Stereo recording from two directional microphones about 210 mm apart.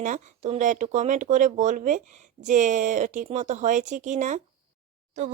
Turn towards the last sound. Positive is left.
turn(degrees=-35)  # may be behind; listen again after turning